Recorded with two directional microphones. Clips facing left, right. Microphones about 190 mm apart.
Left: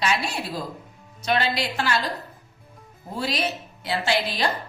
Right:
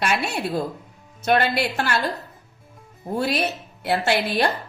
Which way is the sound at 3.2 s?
55° right (ahead or behind).